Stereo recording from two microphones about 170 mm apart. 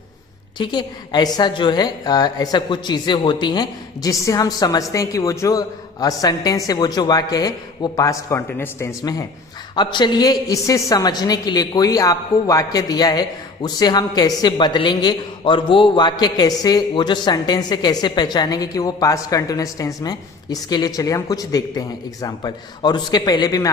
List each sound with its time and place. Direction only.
0.6 s a woman's voice: 25° left (ahead or behind)